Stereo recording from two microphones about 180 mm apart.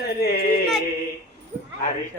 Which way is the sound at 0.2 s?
60° left (ahead or behind).